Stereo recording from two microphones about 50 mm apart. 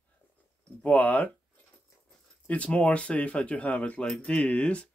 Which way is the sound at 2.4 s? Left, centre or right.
Left.